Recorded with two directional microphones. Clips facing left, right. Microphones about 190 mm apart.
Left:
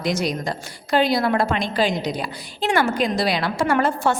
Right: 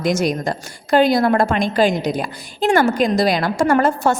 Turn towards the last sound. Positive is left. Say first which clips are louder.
# right 4 dB
turn(degrees=-45)  # may be behind; listen again after turning